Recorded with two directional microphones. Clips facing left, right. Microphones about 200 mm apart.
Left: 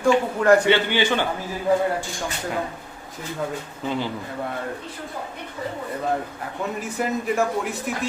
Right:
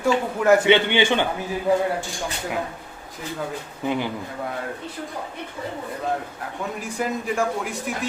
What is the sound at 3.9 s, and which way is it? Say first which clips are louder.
Speech: right 2 dB; 15° right (ahead or behind).